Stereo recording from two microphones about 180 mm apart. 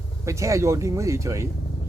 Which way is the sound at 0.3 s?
15° right (ahead or behind).